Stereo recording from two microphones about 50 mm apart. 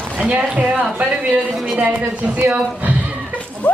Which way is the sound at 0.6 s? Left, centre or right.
Right.